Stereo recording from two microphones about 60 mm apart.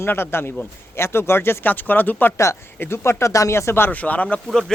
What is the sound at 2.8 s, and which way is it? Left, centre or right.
Speech, left.